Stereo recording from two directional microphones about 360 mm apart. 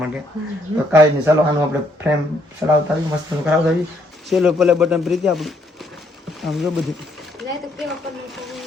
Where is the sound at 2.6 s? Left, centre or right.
Centre.